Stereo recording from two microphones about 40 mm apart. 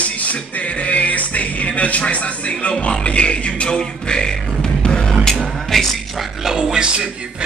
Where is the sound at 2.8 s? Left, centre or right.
Left.